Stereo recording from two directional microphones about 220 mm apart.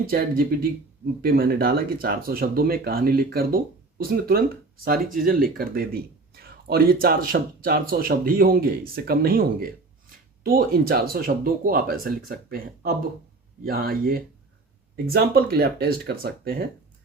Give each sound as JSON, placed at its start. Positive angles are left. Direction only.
{"t": 0.0, "sound": "speech", "side_deg": -40}